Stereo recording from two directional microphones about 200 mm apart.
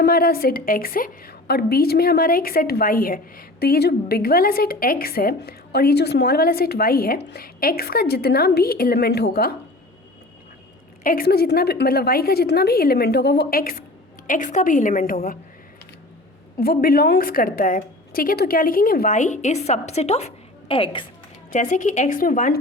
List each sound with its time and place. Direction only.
0.0 s a woman's voice: 50° left (ahead or behind)
11.0 s a woman's voice: 45° left (ahead or behind)
16.6 s a woman's voice: 50° left (ahead or behind); by 21.0 s 25° left (ahead or behind)
21.5 s a woman's voice: 40° left (ahead or behind)